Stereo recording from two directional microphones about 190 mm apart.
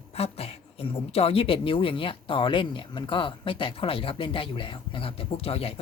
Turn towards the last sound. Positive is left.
turn(degrees=30)  # may be behind; listen again after turning